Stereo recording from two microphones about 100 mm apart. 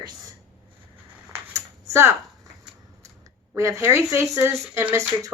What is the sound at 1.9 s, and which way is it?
Speech, 30° right (ahead or behind).